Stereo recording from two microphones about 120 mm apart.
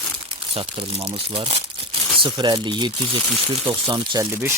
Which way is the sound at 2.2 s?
40° right (ahead or behind).